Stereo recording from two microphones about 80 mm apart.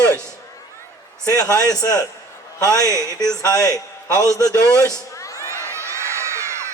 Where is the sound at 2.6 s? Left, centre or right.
Right.